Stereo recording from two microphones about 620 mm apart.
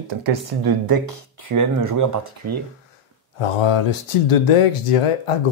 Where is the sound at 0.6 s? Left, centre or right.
Right.